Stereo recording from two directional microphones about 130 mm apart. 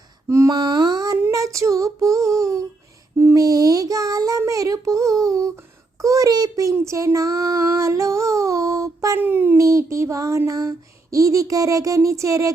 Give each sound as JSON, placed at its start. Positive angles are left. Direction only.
{"t": 0.3, "sound": "female singing", "side_deg": -25}
{"t": 3.2, "sound": "child singing", "side_deg": -25}
{"t": 6.0, "sound": "a sound", "side_deg": -25}
{"t": 6.7, "sound": "child singing", "side_deg": -25}